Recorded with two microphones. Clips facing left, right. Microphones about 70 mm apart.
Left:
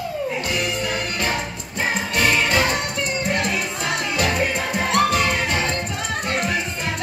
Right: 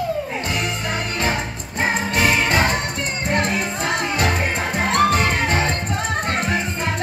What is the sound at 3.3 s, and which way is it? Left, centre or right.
Music, right.